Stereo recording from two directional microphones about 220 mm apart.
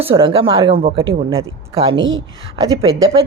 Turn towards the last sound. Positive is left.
turn(degrees=-25)  # may be behind; listen again after turning